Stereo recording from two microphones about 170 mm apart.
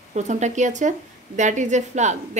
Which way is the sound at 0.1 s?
45° right (ahead or behind).